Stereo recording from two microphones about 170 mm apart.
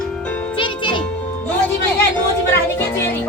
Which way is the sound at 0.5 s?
30° left (ahead or behind).